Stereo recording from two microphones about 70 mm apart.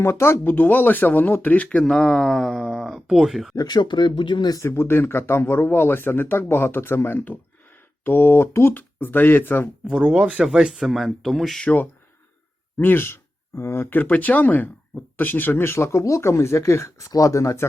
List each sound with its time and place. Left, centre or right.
0.0 s speech: left
1.8 s speech: centre
3.5 s speech: left
4.6 s speech: left
10.2 s speech: centre
11.6 s speech: left
17.1 s speech: left